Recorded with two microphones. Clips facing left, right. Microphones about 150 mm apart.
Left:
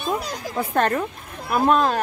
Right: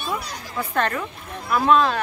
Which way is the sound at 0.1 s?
45° left (ahead or behind).